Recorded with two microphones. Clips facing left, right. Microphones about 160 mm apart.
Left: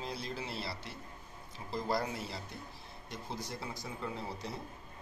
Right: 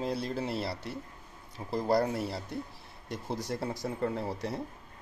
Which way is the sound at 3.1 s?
65° right (ahead or behind).